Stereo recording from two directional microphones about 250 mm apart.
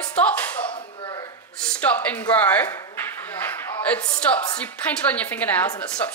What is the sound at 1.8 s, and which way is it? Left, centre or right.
A woman's voice, centre.